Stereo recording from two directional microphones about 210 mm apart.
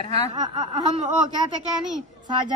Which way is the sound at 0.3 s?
25° right (ahead or behind).